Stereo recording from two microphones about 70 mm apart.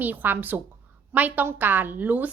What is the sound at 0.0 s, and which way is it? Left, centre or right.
Speech, right.